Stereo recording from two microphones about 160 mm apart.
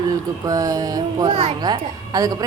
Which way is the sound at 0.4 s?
20° right (ahead or behind).